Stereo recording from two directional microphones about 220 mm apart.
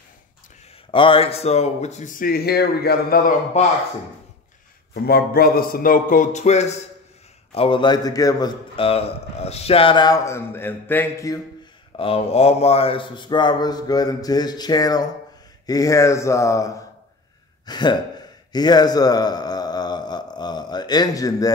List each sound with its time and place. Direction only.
0.9 s speech: 25° left (ahead or behind)
5.0 s a man's voice: 45° left (ahead or behind); by 11.3 s 10° left (ahead or behind)
12.0 s a man's voice: 25° left (ahead or behind)
18.5 s a sound: 20° left (ahead or behind)